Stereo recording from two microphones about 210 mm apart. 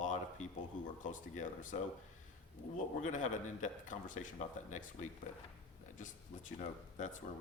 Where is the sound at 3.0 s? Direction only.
35° left (ahead or behind).